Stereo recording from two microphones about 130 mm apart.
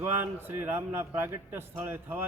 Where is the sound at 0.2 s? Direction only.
15° right (ahead or behind).